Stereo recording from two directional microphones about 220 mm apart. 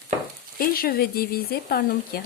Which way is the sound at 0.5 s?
40° left (ahead or behind).